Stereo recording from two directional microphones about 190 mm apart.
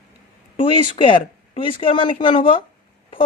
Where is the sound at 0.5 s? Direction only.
25° left (ahead or behind).